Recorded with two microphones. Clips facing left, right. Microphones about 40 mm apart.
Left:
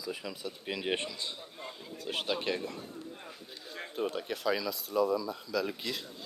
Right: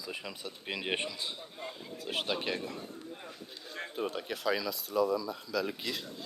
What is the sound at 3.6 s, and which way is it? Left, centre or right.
Speech, centre.